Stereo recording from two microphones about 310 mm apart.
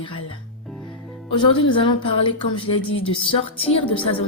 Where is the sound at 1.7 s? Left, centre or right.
Centre.